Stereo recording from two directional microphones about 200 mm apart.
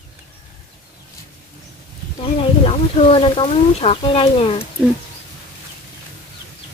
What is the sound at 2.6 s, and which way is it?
Speech, 30° left (ahead or behind).